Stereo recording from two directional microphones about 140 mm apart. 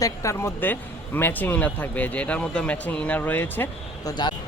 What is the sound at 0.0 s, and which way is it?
Speech, 20° left (ahead or behind).